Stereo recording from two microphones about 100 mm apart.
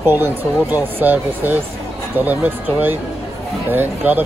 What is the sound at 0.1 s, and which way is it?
Speech, 20° right (ahead or behind).